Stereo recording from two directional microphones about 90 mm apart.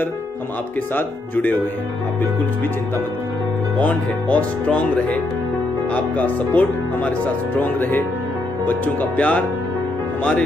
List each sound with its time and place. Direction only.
0.9 s speech: 20° left (ahead or behind)
3.8 s speech: 15° left (ahead or behind)